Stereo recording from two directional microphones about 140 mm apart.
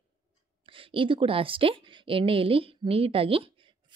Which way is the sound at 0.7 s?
40° right (ahead or behind).